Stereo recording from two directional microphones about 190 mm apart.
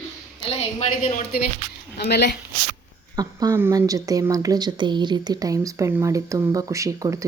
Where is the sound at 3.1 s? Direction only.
20° right (ahead or behind).